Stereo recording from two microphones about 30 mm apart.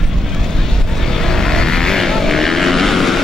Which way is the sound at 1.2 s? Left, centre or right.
Centre.